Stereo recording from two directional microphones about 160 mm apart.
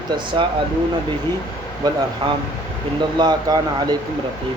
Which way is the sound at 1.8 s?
25° right (ahead or behind).